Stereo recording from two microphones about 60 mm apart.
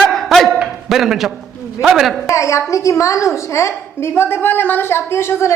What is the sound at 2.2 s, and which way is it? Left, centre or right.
A woman's voice, left.